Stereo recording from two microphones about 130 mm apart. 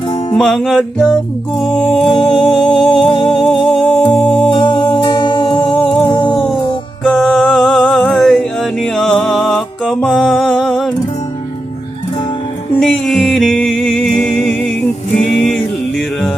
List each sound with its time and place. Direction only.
0.3 s music: 5° left (ahead or behind)
2.1 s music: 45° left (ahead or behind)
2.6 s music: 5° left (ahead or behind)
3.0 s music: 40° left (ahead or behind)
3.8 s music: centre (ahead or behind)
4.5 s music: 35° left (ahead or behind)
7.0 s music: 5° left (ahead or behind)
12.8 s music: 5° left (ahead or behind)